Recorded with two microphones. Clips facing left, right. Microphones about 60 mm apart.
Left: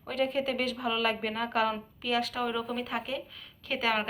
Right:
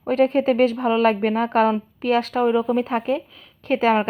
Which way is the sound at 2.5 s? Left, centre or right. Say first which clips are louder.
Right 13 dB; right.